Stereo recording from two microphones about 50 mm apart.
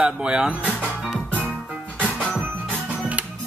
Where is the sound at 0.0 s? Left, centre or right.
Centre.